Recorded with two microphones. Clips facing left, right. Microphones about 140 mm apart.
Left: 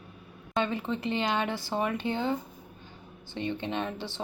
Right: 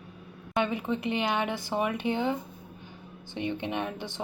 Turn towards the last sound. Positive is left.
turn(degrees=-15)  # may be behind; listen again after turning